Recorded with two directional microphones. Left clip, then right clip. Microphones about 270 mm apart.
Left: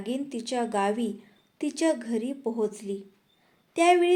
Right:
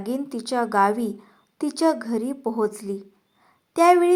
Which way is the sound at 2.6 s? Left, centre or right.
Right.